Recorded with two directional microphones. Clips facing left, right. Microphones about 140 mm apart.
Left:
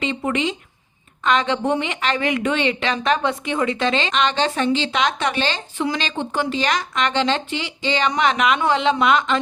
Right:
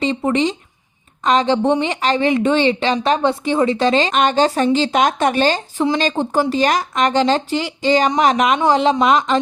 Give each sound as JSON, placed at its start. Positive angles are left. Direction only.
{"t": 0.0, "sound": "a woman's voice", "side_deg": -35}